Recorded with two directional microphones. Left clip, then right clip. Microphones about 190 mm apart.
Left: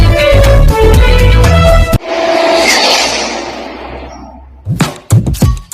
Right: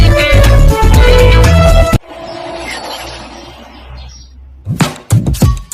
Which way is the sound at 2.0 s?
55° left (ahead or behind).